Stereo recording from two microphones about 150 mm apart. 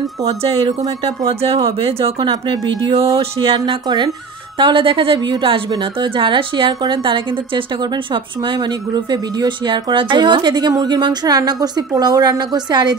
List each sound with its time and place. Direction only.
0.7 s a woman's voice: 40° right (ahead or behind)